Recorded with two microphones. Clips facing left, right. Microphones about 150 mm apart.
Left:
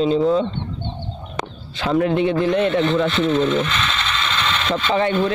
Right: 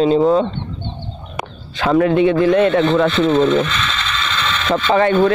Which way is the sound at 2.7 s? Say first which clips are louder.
Right 4 dB; 90° right.